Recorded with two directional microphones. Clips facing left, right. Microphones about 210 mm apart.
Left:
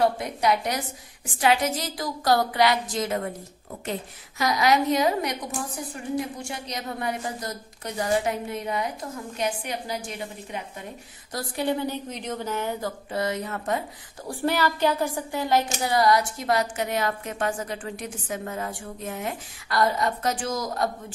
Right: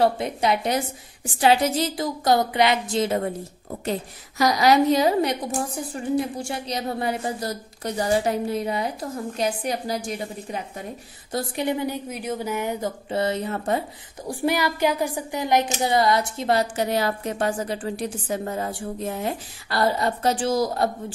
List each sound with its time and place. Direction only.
0.0 s a woman's voice: 25° right (ahead or behind)
4.4 s a woman's voice: 35° right (ahead or behind)
11.3 s a woman's voice: 20° right (ahead or behind)
13.1 s a woman's voice: 30° right (ahead or behind)
14.2 s a woman's voice: 15° right (ahead or behind); by 20.9 s 30° right (ahead or behind)